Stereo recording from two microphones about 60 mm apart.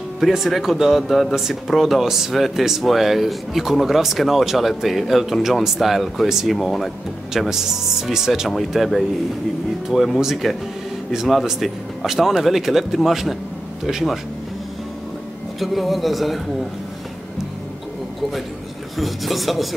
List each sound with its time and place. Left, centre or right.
0.2 s speech: centre
10.2 s speech: centre
15.6 s speech: centre
18.9 s speech: centre